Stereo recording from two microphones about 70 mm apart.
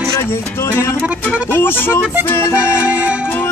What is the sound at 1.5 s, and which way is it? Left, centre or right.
Speech, left.